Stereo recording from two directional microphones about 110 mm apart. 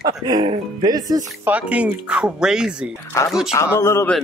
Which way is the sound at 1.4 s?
10° right (ahead or behind).